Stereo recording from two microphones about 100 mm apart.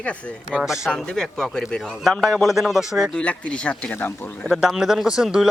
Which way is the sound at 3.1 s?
10° left (ahead or behind).